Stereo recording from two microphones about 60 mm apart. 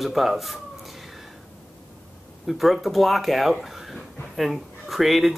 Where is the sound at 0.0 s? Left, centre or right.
Centre.